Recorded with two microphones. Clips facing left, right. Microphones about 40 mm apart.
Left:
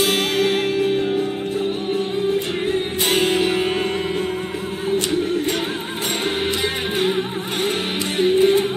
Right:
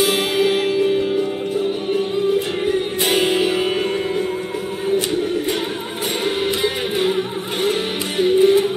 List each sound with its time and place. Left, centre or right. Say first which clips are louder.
0.0 s music: right 1 dB; centre
3.0 s music: even; centre
8.2 s music: right 2 dB; centre